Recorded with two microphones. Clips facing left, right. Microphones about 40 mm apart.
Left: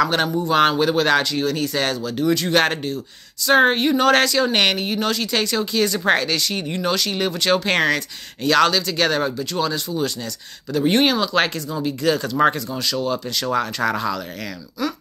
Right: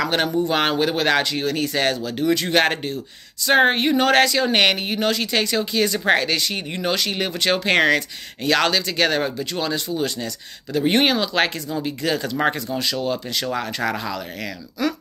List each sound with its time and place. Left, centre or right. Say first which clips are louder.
0.0 s speech: left 1 dB; centre
1.2 s speech: left 1 dB; right
2.5 s speech: even; centre
6.2 s speech: even; right
13.8 s speech: left 3 dB; centre